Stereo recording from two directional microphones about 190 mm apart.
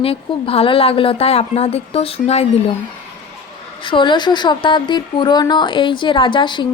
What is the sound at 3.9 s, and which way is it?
Speech, 25° left (ahead or behind).